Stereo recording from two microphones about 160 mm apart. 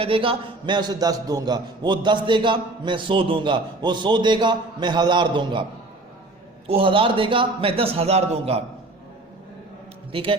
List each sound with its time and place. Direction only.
0.0 s a man's voice: 35° right (ahead or behind)
6.7 s a man's voice: 35° right (ahead or behind)
10.1 s a man's voice: 35° right (ahead or behind)